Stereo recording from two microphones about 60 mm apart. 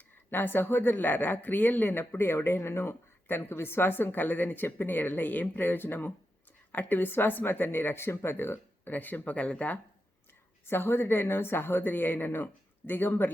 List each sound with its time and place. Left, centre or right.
0.3 s speech: left
10.7 s speech: left